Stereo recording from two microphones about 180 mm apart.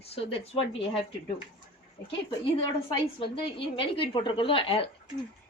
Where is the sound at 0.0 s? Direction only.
35° left (ahead or behind).